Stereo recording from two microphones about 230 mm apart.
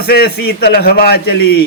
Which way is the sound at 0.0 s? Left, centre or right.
Left.